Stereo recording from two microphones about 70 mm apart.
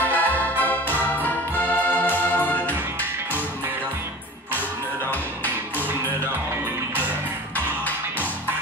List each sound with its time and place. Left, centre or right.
0.0 s music: left